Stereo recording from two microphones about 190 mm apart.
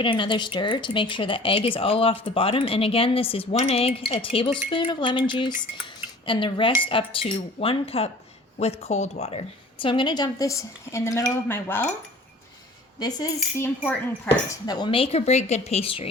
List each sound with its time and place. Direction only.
0.0 s speech: 25° left (ahead or behind)
13.0 s speech: 20° left (ahead or behind)
13.8 s speech: 5° left (ahead or behind)
14.7 s speech: 25° left (ahead or behind)